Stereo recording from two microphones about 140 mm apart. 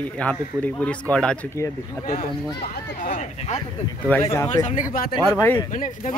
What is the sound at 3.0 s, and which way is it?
Speech, 65° left (ahead or behind).